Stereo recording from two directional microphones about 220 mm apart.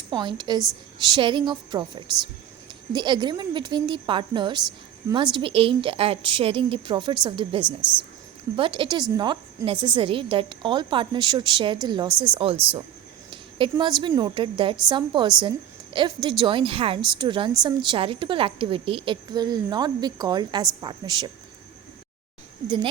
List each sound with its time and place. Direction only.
0.1 s a woman's voice: 20° right (ahead or behind)
7.6 s speech: 5° right (ahead or behind)
8.5 s a woman's voice: 25° right (ahead or behind)
13.3 s a sound: 20° right (ahead or behind)
14.1 s a woman's voice: 20° right (ahead or behind)